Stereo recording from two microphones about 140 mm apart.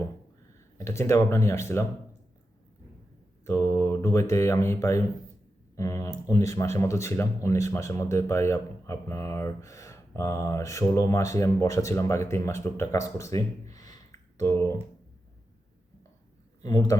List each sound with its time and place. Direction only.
0.9 s speech: 20° left (ahead or behind)
3.4 s speech: 15° left (ahead or behind)
16.6 s speech: 25° left (ahead or behind)